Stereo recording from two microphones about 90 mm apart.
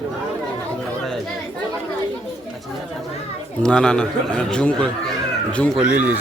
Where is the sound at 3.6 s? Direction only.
10° left (ahead or behind).